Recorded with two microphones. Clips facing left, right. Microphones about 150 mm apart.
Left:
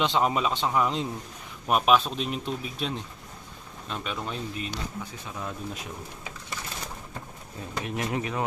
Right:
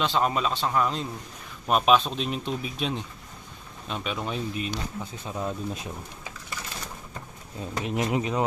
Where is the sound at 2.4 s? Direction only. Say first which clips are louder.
Right 2 dB; 15° right (ahead or behind).